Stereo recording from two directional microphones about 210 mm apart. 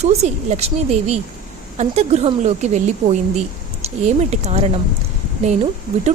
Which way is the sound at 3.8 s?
30° right (ahead or behind).